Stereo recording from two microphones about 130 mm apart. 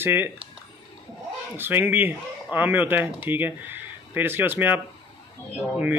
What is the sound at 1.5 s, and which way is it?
Speech, 15° right (ahead or behind).